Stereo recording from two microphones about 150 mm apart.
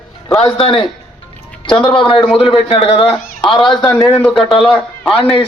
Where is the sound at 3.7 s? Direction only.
30° left (ahead or behind).